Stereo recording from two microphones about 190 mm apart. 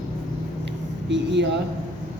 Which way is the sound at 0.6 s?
70° right (ahead or behind).